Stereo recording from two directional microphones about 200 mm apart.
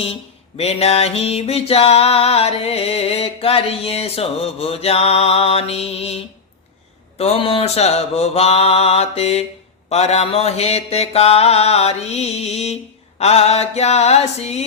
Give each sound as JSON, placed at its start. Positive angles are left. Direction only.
{"t": 0.0, "sound": "music", "side_deg": 30}
{"t": 7.2, "sound": "music", "side_deg": 30}